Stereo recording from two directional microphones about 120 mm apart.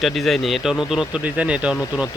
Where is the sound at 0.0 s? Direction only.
Centre (ahead or behind).